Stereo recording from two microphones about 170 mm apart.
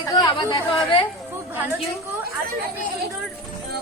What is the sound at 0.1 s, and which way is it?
Speech, 25° left (ahead or behind).